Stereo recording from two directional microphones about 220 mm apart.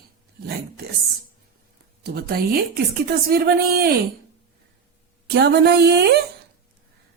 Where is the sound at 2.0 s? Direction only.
45° right (ahead or behind).